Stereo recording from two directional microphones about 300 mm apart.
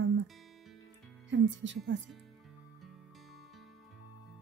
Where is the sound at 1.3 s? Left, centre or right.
Right.